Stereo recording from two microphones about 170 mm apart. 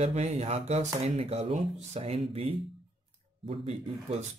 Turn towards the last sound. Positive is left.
turn(degrees=-40)  # may be behind; listen again after turning